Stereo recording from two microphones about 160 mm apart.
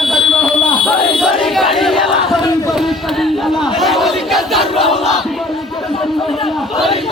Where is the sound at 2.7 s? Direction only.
Centre (ahead or behind).